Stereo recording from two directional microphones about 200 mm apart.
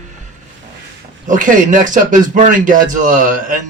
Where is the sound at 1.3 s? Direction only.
40° right (ahead or behind).